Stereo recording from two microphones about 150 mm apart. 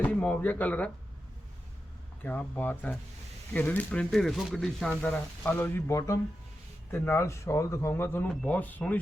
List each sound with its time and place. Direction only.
0.0 s speech: 10° left (ahead or behind)
2.2 s speech: 10° left (ahead or behind)